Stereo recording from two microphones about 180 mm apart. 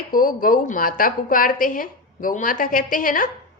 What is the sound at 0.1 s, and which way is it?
A woman's voice, 50° left (ahead or behind).